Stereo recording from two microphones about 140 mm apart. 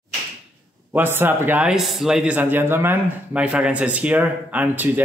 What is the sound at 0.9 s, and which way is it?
A man's voice, 15° right (ahead or behind).